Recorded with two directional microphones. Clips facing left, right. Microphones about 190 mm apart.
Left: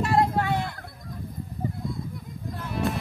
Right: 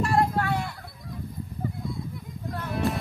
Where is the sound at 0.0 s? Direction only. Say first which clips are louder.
Left 1 dB; 20° left (ahead or behind).